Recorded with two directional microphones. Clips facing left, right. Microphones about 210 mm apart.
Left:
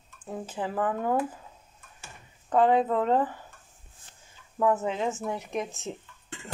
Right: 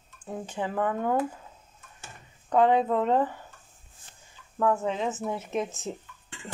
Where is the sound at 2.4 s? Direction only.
5° left (ahead or behind).